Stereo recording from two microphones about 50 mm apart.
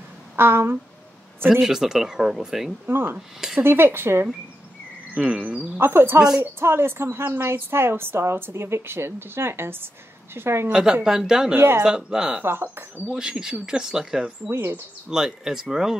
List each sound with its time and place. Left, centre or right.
0.4 s a woman's voice: right
1.5 s speech: centre
2.9 s a woman's voice: right
5.2 s speech: centre
5.8 s a woman's voice: right
10.7 s speech: centre
11.5 s a woman's voice: right
11.8 s speech: centre
14.5 s a woman's voice: right
15.0 s speech: centre